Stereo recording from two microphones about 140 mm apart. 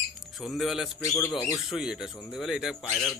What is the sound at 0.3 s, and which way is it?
Speech, centre (ahead or behind).